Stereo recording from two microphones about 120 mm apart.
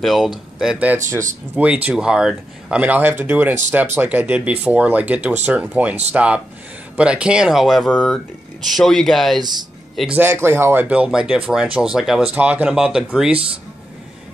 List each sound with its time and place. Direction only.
0.0 s speech: centre (ahead or behind)
9.4 s speech: 35° right (ahead or behind)
10.1 s speech: 20° right (ahead or behind)